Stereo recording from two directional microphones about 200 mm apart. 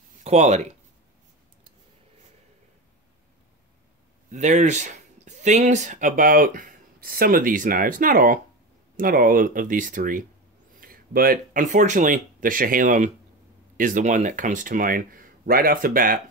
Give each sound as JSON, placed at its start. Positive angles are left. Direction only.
{"t": 0.2, "sound": "speech", "side_deg": -35}
{"t": 4.3, "sound": "speech", "side_deg": -35}